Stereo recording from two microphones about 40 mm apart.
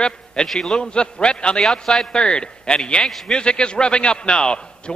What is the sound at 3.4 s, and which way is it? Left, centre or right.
A man's voice, left.